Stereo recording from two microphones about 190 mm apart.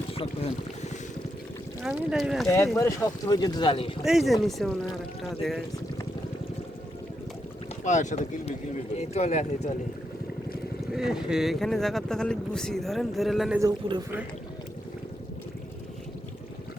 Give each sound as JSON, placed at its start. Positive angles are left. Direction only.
{"t": 0.1, "sound": "boat", "side_deg": 30}
{"t": 1.8, "sound": "speech", "side_deg": -5}
{"t": 2.7, "sound": "speech", "side_deg": 15}
{"t": 4.0, "sound": "speech", "side_deg": 0}
{"t": 7.9, "sound": "speech", "side_deg": 40}
{"t": 10.9, "sound": "speech", "side_deg": -5}
{"t": 13.6, "sound": "a man's voice", "side_deg": -20}